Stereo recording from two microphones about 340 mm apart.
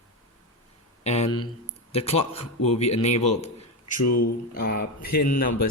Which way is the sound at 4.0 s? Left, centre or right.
Left.